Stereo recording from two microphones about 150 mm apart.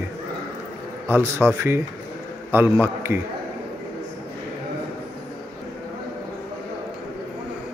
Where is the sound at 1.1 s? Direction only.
15° right (ahead or behind).